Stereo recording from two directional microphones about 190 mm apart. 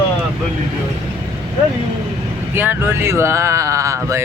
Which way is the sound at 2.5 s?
10° right (ahead or behind).